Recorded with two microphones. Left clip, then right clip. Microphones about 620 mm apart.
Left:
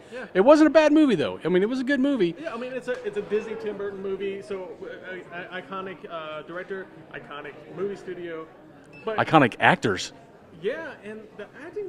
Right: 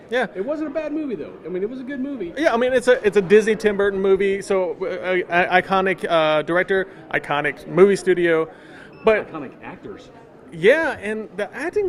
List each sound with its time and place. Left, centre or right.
0.3 s speech: left
2.3 s speech: right
9.3 s speech: left
10.6 s speech: right